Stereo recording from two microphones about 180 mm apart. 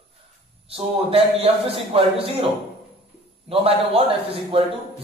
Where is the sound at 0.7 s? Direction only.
30° right (ahead or behind).